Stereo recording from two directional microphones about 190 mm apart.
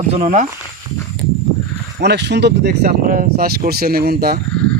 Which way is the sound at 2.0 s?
65° right (ahead or behind).